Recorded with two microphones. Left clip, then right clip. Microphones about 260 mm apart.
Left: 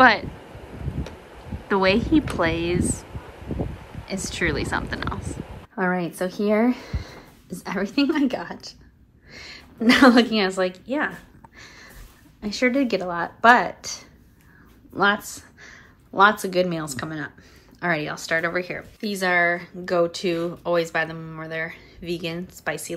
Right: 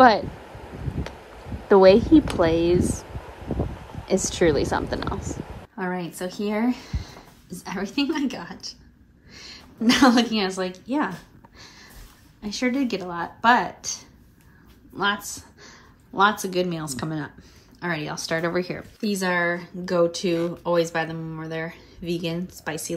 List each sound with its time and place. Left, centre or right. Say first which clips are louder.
0.0 s speech: even; centre
1.7 s speech: right 6 dB; centre
5.8 s a woman's voice: left 5 dB; centre
11.5 s a sound: left 2 dB; centre
12.4 s speech: left 4 dB; centre